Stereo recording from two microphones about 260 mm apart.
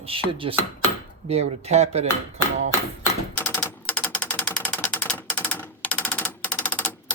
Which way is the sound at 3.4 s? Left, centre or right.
Centre.